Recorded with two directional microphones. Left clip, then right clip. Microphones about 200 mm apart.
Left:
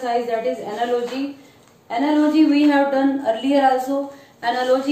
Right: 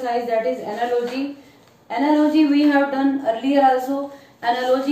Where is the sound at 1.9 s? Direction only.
20° left (ahead or behind).